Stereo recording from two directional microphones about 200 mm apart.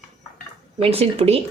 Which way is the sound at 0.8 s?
30° right (ahead or behind).